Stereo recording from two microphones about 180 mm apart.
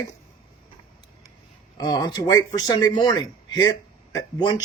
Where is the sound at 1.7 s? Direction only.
20° left (ahead or behind).